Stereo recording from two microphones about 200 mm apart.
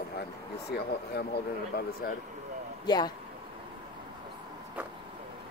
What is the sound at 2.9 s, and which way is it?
Speech, 20° left (ahead or behind).